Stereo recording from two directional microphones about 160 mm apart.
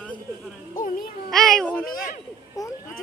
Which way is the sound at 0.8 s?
60° left (ahead or behind).